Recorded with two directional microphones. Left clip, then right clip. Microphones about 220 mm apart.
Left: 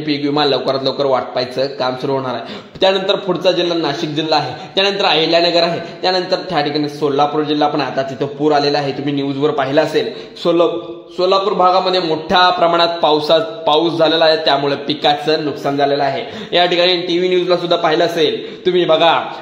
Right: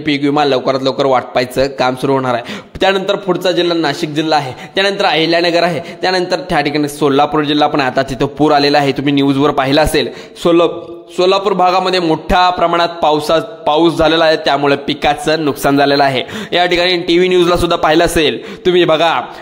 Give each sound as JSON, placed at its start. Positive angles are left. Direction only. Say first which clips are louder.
{"t": 0.0, "sound": "a man's voice", "louder": "right 3 dB", "side_deg": -30}
{"t": 16.5, "sound": "a man's voice", "louder": "right 1 dB", "side_deg": -25}
{"t": 18.9, "sound": "a man's voice", "louder": "even", "side_deg": -20}